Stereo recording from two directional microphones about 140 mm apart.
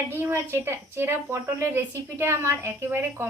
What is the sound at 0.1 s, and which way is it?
A woman's voice, 15° right (ahead or behind).